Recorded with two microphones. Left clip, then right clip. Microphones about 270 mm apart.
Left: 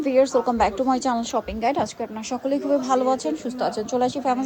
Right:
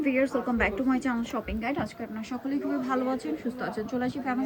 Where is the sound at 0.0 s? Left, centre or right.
Centre.